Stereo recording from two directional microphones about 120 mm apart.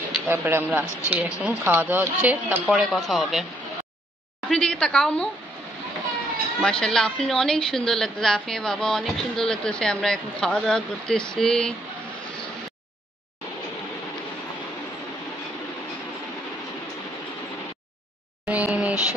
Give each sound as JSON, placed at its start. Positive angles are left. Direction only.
{"t": 0.3, "sound": "speech", "side_deg": -20}
{"t": 2.7, "sound": "a woman's voice", "side_deg": 0}
{"t": 4.5, "sound": "a woman's voice", "side_deg": 5}
{"t": 6.6, "sound": "a woman's voice", "side_deg": 5}
{"t": 18.5, "sound": "a sound", "side_deg": -10}